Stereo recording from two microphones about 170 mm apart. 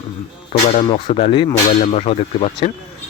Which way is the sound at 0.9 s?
30° left (ahead or behind).